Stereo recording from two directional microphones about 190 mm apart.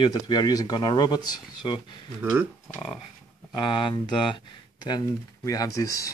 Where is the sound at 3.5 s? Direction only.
25° left (ahead or behind).